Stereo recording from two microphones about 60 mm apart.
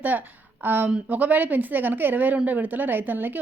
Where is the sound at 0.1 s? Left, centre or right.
Right.